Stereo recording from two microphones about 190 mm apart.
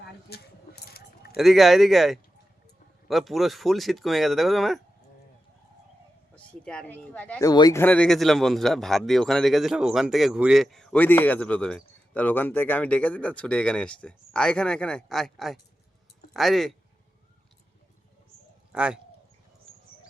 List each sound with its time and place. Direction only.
0.0 s keys jangling: 55° left (ahead or behind)
1.4 s a man's voice: centre (ahead or behind)
6.3 s speech: 5° left (ahead or behind)
7.4 s a man's voice: 20° left (ahead or behind); by 16.7 s centre (ahead or behind)
18.7 s speech: 5° right (ahead or behind)